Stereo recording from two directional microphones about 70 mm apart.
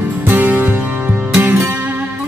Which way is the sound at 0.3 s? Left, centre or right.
Right.